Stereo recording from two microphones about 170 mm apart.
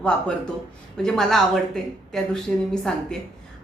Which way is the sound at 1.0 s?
Centre (ahead or behind).